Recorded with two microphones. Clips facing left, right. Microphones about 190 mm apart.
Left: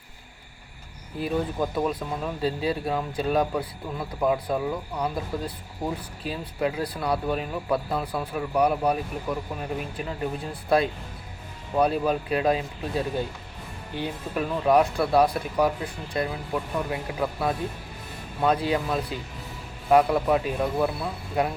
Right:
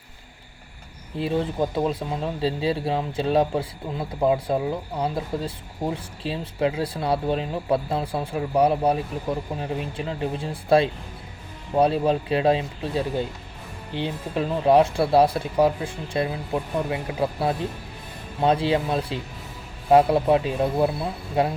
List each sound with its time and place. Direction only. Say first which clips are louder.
1.2 s speech: right 2 dB; 25° right (ahead or behind)